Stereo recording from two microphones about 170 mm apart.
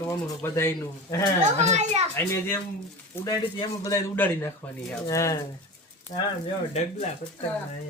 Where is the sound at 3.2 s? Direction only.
20° left (ahead or behind).